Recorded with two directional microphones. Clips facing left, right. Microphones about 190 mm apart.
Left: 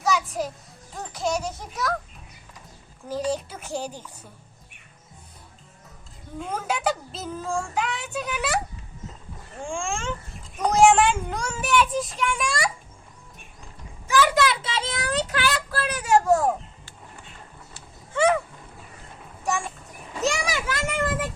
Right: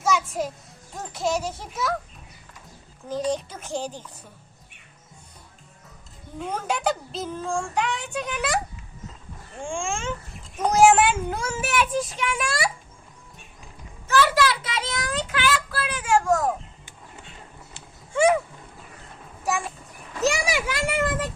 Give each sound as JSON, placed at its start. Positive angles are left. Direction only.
{"t": 0.0, "sound": "music", "side_deg": 0}
{"t": 0.9, "sound": "speech", "side_deg": 0}
{"t": 3.1, "sound": "speech", "side_deg": 5}
{"t": 6.4, "sound": "speech", "side_deg": 0}
{"t": 14.1, "sound": "children playing", "side_deg": 15}
{"t": 15.3, "sound": "child singing", "side_deg": 40}
{"t": 18.1, "sound": "a sound", "side_deg": -10}
{"t": 19.5, "sound": "a sound", "side_deg": 0}
{"t": 20.2, "sound": "a child's voice", "side_deg": -5}